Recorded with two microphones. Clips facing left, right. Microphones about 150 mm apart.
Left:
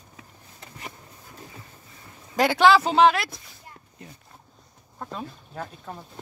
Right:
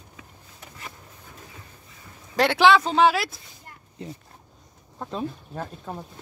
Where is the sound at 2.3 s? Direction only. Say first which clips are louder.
Even; centre (ahead or behind).